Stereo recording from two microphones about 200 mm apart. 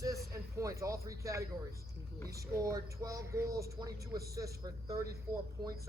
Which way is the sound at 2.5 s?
15° right (ahead or behind).